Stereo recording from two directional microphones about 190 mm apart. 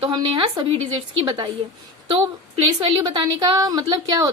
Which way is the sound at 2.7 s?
25° right (ahead or behind).